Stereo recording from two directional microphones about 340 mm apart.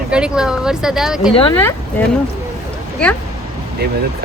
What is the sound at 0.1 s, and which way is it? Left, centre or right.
A man's voice, centre.